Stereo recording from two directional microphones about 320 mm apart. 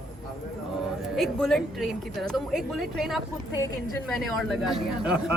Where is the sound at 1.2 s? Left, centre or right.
Centre.